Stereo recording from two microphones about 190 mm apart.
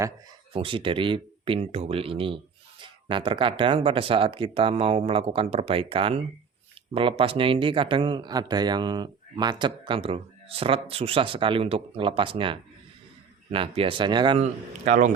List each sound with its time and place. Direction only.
0.5 s speech: 30° right (ahead or behind)
14.4 s a man's voice: 40° right (ahead or behind)